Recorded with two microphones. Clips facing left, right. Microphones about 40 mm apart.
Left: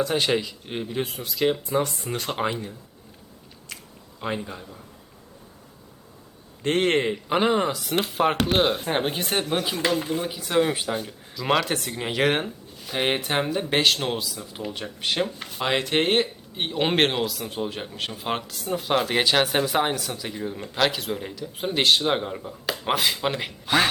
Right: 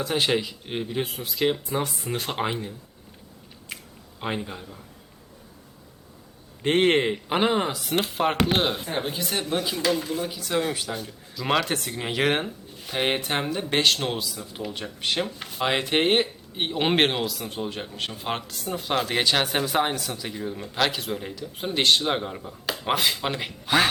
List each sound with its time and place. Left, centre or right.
0.0 s speech: centre
3.7 s a sound: right
4.2 s speech: centre
6.6 s speech: centre
8.8 s speech: left
11.3 s speech: centre